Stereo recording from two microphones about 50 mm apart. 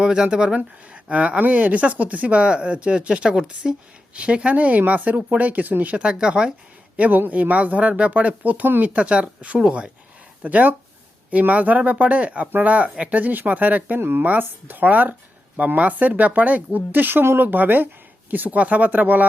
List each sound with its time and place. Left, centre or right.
0.0 s speech: centre; by 6.0 s right
6.0 s speech: centre
6.9 s speech: right
8.9 s speech: right
10.4 s speech: right